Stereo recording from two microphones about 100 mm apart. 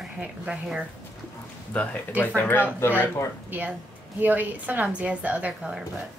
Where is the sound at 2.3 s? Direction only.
15° left (ahead or behind).